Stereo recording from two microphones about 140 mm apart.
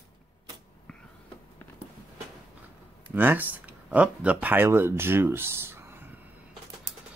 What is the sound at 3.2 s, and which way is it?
Speech, 15° right (ahead or behind).